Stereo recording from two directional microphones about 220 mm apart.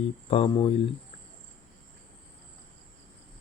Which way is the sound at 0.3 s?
25° left (ahead or behind).